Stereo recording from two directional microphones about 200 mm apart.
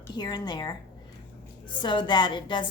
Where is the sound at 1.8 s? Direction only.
25° left (ahead or behind).